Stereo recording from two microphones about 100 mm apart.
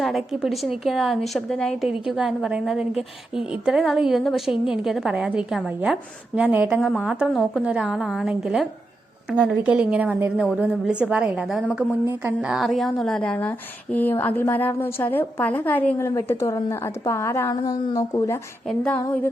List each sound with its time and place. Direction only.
0.0 s a woman's voice: centre (ahead or behind); by 16.0 s 15° left (ahead or behind)
16.0 s a woman's voice: 30° left (ahead or behind)
17.5 s speech: 40° left (ahead or behind)
18.7 s a sound: 15° left (ahead or behind)